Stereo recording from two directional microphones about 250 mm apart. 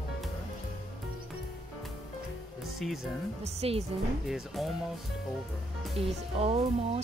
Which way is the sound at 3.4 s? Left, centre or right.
Right.